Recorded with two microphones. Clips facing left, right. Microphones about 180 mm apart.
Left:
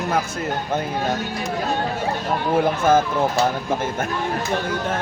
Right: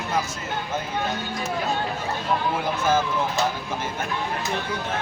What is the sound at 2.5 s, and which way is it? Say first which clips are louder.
Speech: left 9 dB; 50° left (ahead or behind).